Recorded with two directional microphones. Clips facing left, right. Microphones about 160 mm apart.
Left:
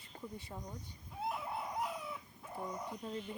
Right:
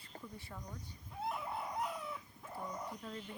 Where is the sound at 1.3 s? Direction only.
Centre (ahead or behind).